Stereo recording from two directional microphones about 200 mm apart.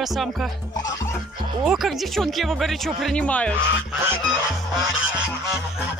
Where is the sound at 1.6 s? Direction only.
Centre (ahead or behind).